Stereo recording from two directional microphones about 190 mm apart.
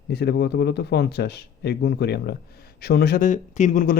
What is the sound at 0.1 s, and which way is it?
Speech, 60° left (ahead or behind).